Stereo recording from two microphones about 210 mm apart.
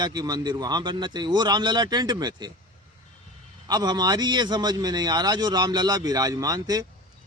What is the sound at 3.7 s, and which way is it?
A man's voice, 20° right (ahead or behind).